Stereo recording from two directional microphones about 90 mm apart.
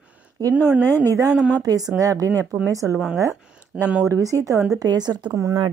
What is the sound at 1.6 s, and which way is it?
Speech, 45° right (ahead or behind).